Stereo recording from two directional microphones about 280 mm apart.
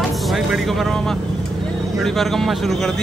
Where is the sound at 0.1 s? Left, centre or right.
Centre.